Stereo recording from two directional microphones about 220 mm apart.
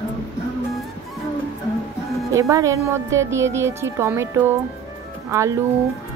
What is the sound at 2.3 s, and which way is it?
Speech, 15° right (ahead or behind).